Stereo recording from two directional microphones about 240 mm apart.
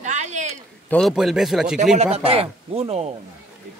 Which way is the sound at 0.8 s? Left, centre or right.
Centre.